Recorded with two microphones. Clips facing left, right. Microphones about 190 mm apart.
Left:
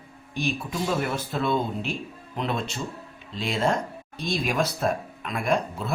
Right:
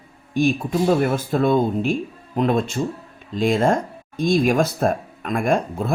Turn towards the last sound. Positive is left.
turn(degrees=-50)  # may be behind; listen again after turning